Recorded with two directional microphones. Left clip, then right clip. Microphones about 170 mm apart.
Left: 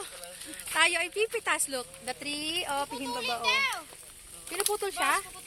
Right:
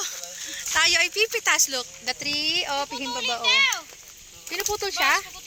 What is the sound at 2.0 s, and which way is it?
Speech, 45° right (ahead or behind).